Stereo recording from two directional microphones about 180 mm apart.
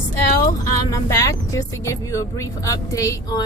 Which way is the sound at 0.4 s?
20° left (ahead or behind).